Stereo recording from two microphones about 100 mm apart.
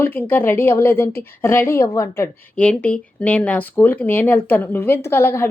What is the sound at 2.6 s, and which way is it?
A woman's voice, 10° left (ahead or behind).